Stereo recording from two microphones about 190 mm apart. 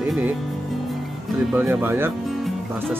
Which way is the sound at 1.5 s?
10° right (ahead or behind).